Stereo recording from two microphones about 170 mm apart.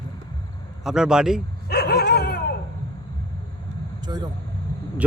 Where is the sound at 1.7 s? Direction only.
65° left (ahead or behind).